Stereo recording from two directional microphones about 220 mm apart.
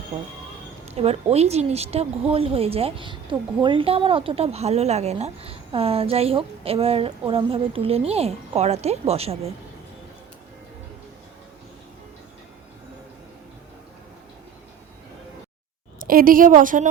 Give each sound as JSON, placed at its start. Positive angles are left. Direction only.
{"t": 0.9, "sound": "speech", "side_deg": -30}
{"t": 16.0, "sound": "a woman's voice", "side_deg": -40}